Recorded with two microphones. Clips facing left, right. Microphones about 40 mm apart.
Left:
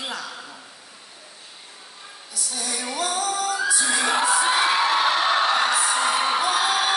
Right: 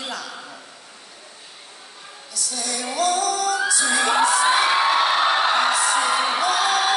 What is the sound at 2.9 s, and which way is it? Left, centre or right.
Music, centre.